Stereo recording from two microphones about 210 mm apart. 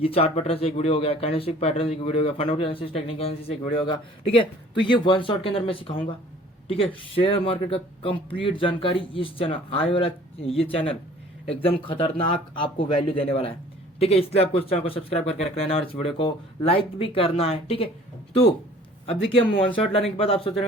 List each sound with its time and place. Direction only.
0.0 s speech: 30° left (ahead or behind)
19.0 s speech: 25° left (ahead or behind)